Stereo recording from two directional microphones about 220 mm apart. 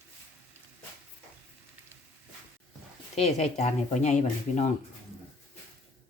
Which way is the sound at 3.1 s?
30° left (ahead or behind).